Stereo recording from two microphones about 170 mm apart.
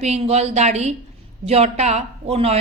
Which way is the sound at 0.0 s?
40° right (ahead or behind).